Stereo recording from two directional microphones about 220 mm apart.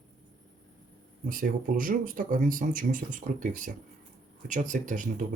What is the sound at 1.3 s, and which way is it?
Speech, 40° right (ahead or behind).